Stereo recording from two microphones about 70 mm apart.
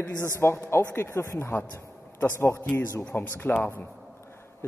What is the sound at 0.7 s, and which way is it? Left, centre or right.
A man's voice, left.